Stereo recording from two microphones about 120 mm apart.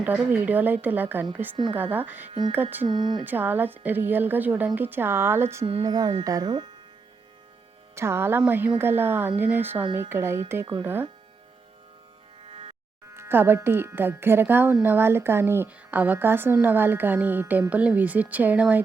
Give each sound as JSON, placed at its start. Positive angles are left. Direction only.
{"t": 0.0, "sound": "speech", "side_deg": -15}
{"t": 2.8, "sound": "speech", "side_deg": -40}
{"t": 3.2, "sound": "speech", "side_deg": -15}
{"t": 5.8, "sound": "speech", "side_deg": -35}
{"t": 7.9, "sound": "a woman's voice", "side_deg": -20}
{"t": 13.1, "sound": "speech", "side_deg": -20}